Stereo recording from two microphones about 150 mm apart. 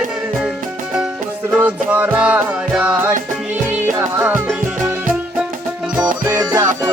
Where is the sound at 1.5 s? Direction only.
10° right (ahead or behind).